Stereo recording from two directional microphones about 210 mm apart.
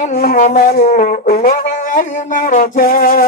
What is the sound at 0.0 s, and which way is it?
Wind instrument, 45° left (ahead or behind).